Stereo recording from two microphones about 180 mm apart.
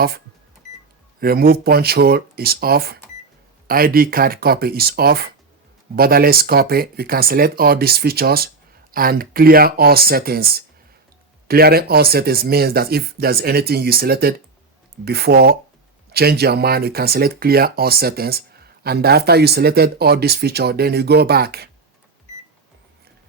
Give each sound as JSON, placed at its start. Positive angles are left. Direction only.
{"t": 1.2, "sound": "speech", "side_deg": -55}